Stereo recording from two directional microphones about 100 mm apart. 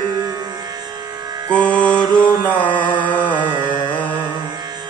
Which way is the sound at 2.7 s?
50° right (ahead or behind).